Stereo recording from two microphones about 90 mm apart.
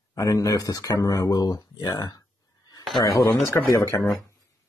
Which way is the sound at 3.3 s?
25° left (ahead or behind).